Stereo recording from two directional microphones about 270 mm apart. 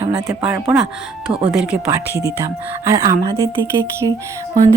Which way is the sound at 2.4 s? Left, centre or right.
Centre.